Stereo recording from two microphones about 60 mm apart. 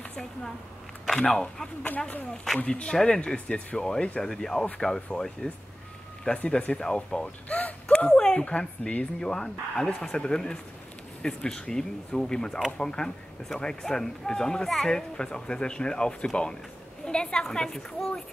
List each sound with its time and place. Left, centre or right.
0.1 s speech: centre